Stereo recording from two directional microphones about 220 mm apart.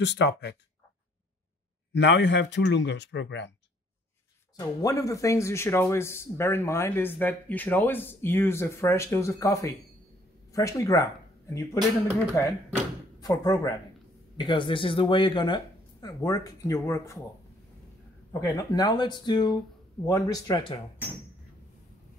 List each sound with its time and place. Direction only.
0.0 s speech: 50° left (ahead or behind)
2.0 s speech: 55° left (ahead or behind)
4.6 s speech: 15° left (ahead or behind)
13.2 s speech: 15° left (ahead or behind)
18.4 s speech: 15° left (ahead or behind)